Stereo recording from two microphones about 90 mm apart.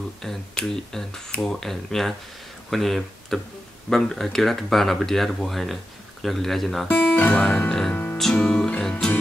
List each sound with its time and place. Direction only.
0.2 s speech: 5° left (ahead or behind)
6.9 s speech: 20° left (ahead or behind)
7.4 s music: 10° left (ahead or behind)
7.9 s music: 25° left (ahead or behind)
8.2 s music: 5° left (ahead or behind)